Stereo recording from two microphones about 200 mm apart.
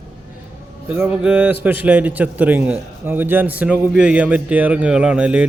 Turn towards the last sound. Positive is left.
turn(degrees=-5)  # may be behind; listen again after turning